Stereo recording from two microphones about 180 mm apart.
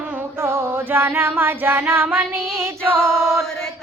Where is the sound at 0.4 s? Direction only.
15° right (ahead or behind).